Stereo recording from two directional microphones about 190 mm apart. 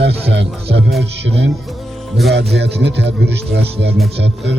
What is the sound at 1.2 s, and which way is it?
Speech, 70° right (ahead or behind).